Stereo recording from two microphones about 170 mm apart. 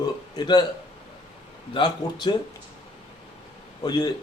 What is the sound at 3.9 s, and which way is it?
Speech, 25° left (ahead or behind).